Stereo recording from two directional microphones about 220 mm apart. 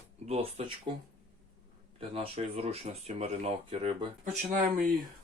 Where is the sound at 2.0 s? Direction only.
25° right (ahead or behind).